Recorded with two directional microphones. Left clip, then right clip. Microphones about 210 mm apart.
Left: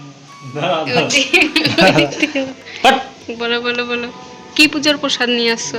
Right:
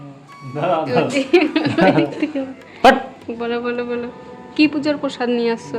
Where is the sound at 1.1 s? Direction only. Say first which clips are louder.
Left 6 dB; 25° right (ahead or behind).